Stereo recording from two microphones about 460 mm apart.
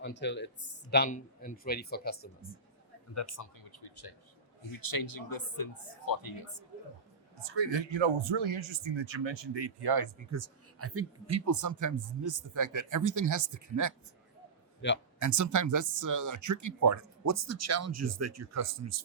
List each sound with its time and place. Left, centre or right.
0.0 s speech: left
3.2 s speech: left
7.4 s speech: right
10.3 s speech: right
15.2 s speech: right